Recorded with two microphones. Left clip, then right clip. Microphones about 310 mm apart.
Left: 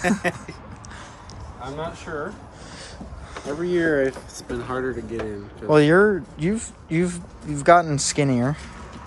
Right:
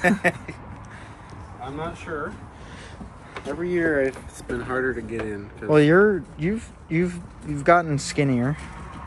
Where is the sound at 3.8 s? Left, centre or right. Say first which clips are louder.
Left 1 dB; left.